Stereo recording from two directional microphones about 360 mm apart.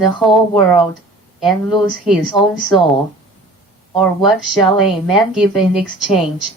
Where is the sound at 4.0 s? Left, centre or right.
Centre.